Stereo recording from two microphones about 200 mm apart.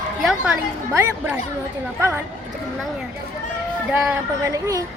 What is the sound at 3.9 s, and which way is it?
Speech, 5° right (ahead or behind).